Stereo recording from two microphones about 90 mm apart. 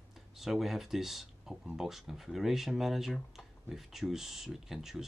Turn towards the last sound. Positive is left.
turn(degrees=-5)  # may be behind; listen again after turning